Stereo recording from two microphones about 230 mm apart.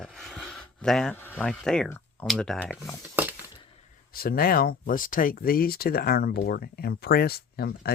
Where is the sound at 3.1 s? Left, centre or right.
Centre.